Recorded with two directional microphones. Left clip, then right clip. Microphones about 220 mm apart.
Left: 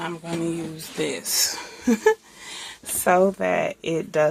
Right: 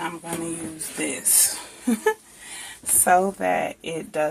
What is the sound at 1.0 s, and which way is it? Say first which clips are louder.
Speech: left 1 dB; 30° left (ahead or behind).